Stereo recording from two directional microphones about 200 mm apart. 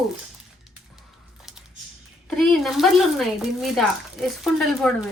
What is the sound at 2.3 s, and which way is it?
Speech, 5° left (ahead or behind).